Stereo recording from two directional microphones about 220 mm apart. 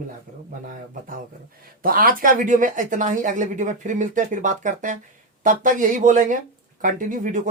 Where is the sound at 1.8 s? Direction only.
40° right (ahead or behind).